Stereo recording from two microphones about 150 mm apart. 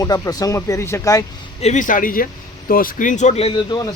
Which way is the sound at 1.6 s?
50° left (ahead or behind).